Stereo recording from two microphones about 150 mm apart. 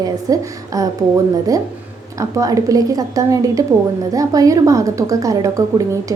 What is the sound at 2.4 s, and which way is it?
A woman's voice, 25° right (ahead or behind).